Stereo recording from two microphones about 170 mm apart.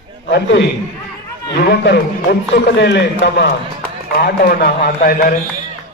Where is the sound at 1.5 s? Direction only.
75° left (ahead or behind); by 3.5 s 90° left.